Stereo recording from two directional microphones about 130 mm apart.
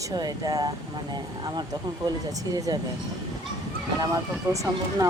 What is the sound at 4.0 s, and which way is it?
Speech, 25° right (ahead or behind).